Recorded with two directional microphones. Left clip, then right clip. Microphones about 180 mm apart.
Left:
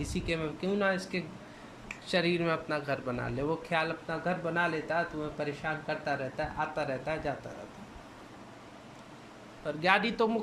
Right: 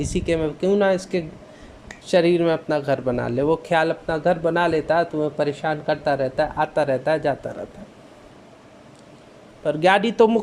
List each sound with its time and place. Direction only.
0.0 s speech: 35° right (ahead or behind)
9.6 s speech: 40° right (ahead or behind)